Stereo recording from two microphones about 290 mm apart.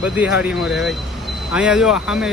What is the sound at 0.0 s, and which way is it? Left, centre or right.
Speech, centre.